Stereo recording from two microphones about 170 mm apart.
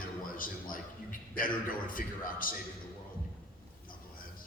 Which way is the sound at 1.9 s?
55° left (ahead or behind).